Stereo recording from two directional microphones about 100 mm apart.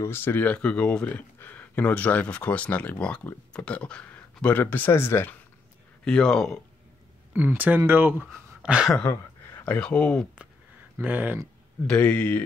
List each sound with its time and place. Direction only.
0.0 s speech: 25° left (ahead or behind)
6.0 s speech: 5° left (ahead or behind)
7.3 s speech: 15° right (ahead or behind)
8.6 s speech: 10° right (ahead or behind)
9.7 s speech: 10° left (ahead or behind)
11.0 s speech: 15° right (ahead or behind)
11.9 s speech: 15° left (ahead or behind)